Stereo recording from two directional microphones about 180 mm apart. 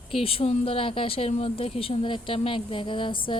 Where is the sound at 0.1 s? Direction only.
30° left (ahead or behind).